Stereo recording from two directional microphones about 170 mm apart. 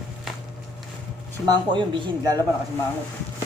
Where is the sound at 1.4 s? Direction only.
25° right (ahead or behind).